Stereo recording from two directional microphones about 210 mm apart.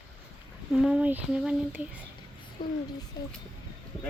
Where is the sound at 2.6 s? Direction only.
25° left (ahead or behind).